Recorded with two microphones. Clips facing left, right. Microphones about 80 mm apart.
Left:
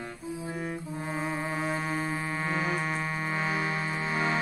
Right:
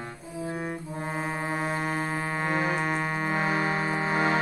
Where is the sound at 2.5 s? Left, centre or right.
Right.